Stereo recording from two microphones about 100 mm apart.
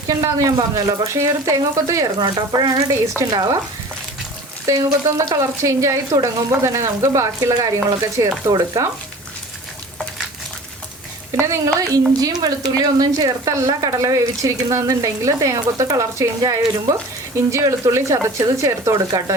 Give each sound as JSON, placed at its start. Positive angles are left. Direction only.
{"t": 0.1, "sound": "speech", "side_deg": -35}
{"t": 2.1, "sound": "speech", "side_deg": -50}
{"t": 4.6, "sound": "speech", "side_deg": -35}
{"t": 11.3, "sound": "speech", "side_deg": -30}
{"t": 16.4, "sound": "speech", "side_deg": -45}
{"t": 17.5, "sound": "speech", "side_deg": -30}